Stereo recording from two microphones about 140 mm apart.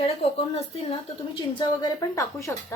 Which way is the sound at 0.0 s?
50° left (ahead or behind).